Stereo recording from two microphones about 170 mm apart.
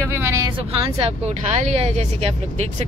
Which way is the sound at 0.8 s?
35° right (ahead or behind).